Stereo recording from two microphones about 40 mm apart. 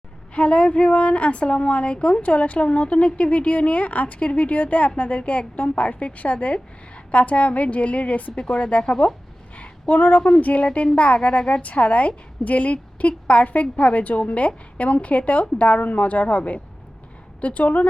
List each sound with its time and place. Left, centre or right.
0.3 s a woman's voice: left